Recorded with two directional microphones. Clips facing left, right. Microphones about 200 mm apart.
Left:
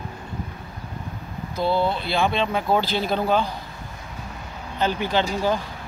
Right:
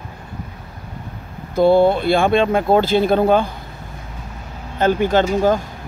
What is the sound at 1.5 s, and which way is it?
Speech, 50° right (ahead or behind).